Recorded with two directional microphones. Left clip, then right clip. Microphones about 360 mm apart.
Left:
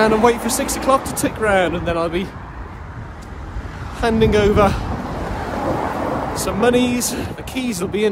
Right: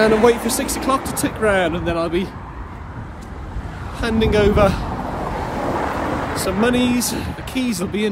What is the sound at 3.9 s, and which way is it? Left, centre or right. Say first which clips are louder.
Speech: left 2 dB; centre.